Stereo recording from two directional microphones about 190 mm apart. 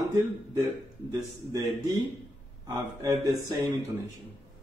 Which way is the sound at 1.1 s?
20° right (ahead or behind).